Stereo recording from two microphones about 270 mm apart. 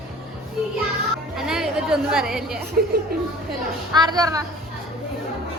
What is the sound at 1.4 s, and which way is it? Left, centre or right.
A woman's voice, centre.